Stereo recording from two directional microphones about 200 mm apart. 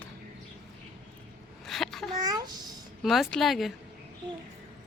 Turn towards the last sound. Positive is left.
turn(degrees=0)  # may be behind; listen again after turning